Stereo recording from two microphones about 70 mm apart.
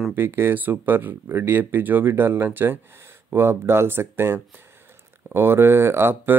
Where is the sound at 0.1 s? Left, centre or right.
Right.